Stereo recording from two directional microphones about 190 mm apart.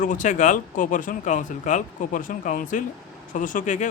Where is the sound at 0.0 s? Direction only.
40° left (ahead or behind).